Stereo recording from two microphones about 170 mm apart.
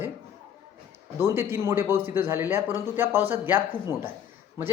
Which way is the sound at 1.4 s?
15° right (ahead or behind).